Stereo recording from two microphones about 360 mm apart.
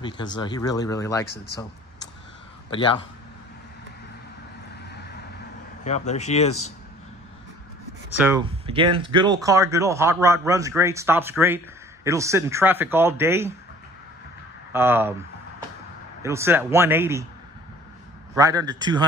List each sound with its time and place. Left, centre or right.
0.4 s speech: centre
1.2 s speech: left
2.7 s speech: centre
5.9 s speech: centre
8.2 s speech: centre
14.7 s speech: centre
16.2 s speech: centre
18.3 s speech: centre